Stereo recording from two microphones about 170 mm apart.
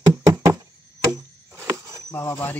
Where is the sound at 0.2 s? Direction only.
20° right (ahead or behind).